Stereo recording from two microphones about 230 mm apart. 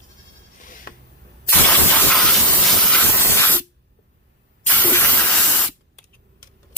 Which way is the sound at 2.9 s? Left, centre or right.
Centre.